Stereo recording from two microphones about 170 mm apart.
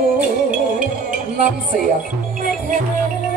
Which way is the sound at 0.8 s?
50° right (ahead or behind).